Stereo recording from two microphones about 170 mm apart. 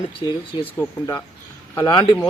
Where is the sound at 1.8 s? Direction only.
25° left (ahead or behind).